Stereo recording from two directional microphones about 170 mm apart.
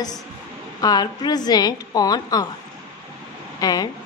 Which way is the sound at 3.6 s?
25° left (ahead or behind).